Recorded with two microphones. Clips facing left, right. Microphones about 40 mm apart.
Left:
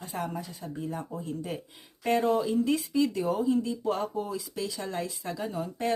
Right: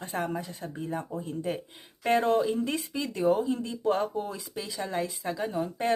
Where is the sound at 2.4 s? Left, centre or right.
Right.